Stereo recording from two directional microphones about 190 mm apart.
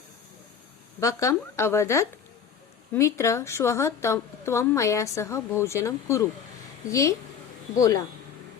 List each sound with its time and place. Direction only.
0.9 s a woman's voice: 15° left (ahead or behind)